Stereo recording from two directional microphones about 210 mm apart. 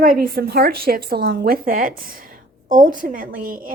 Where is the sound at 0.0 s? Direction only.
45° right (ahead or behind).